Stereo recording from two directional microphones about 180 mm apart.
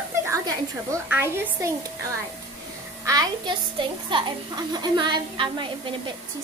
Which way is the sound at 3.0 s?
25° right (ahead or behind).